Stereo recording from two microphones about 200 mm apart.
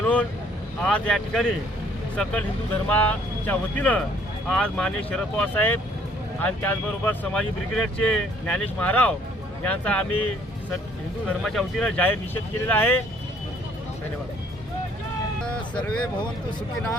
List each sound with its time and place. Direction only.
0.0 s vehicle: 5° left (ahead or behind)
0.9 s speech: 5° left (ahead or behind)
11.3 s speech: centre (ahead or behind)
15.4 s speech: 5° left (ahead or behind)